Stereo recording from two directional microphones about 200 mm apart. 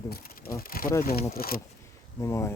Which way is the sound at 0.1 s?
50° left (ahead or behind).